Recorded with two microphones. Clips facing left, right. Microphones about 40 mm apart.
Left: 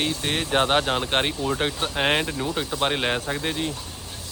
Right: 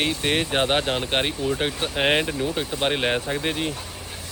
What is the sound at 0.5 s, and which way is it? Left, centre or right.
Speech, centre.